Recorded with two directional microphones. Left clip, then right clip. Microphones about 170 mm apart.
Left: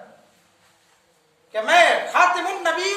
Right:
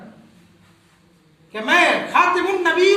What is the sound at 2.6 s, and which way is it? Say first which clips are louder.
Speech: right 6 dB; 30° left (ahead or behind).